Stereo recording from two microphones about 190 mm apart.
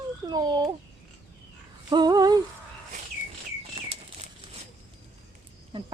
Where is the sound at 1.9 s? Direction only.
20° right (ahead or behind).